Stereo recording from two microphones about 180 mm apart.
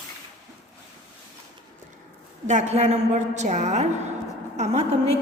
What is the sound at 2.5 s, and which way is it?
A woman's voice, 40° right (ahead or behind).